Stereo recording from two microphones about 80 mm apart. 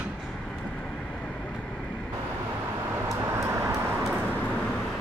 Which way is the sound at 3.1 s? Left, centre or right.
Right.